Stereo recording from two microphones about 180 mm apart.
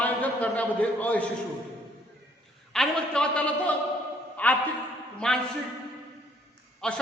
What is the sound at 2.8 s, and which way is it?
A man's voice, 5° left (ahead or behind).